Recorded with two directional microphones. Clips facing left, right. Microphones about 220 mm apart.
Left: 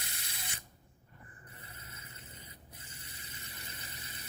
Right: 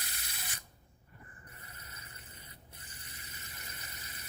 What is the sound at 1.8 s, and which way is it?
Vehicle, 25° left (ahead or behind).